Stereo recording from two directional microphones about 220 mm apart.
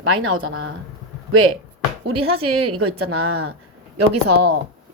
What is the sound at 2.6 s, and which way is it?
Speech, 80° right.